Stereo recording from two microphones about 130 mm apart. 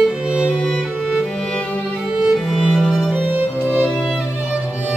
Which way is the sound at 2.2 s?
Centre (ahead or behind).